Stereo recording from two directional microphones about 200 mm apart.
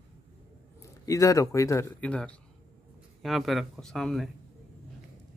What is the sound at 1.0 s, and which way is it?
Speech, 15° left (ahead or behind).